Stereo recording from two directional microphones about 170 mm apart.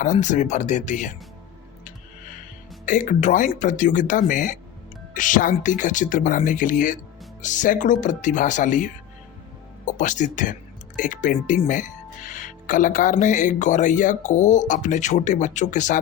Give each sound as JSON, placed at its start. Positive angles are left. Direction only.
{"t": 0.0, "sound": "speech", "side_deg": 45}
{"t": 2.8, "sound": "speech", "side_deg": 50}